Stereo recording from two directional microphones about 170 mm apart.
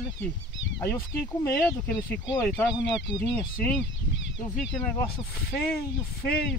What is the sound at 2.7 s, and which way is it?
Speech, 5° right (ahead or behind).